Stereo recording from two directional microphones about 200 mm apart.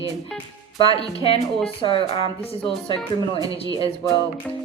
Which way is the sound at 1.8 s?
30° left (ahead or behind).